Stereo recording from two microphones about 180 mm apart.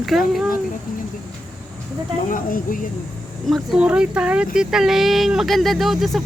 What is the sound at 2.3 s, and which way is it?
Speech, 50° left (ahead or behind).